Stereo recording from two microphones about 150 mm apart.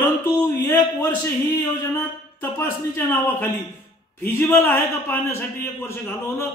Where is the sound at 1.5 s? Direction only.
15° left (ahead or behind).